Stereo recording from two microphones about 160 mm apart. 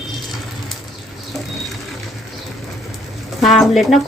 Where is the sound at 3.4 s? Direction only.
Centre (ahead or behind).